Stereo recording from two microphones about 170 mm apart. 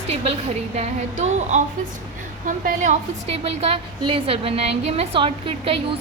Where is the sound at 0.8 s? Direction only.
40° right (ahead or behind).